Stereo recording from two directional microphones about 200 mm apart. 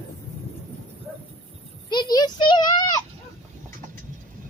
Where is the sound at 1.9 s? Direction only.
20° left (ahead or behind).